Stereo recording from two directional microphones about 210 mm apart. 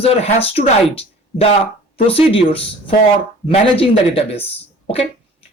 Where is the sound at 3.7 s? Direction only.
25° left (ahead or behind).